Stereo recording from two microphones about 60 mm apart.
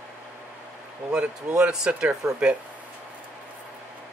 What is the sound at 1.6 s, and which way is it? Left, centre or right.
Speech, centre.